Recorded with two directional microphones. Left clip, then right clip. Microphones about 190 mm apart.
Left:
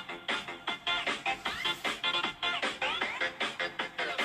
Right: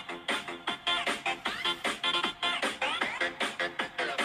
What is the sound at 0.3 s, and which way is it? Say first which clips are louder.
Music: right 1 dB; 30° right (ahead or behind).